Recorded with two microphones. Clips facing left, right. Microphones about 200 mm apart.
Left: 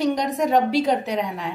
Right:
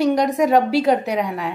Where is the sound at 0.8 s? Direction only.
60° right (ahead or behind).